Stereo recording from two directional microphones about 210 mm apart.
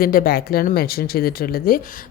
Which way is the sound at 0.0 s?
45° left (ahead or behind).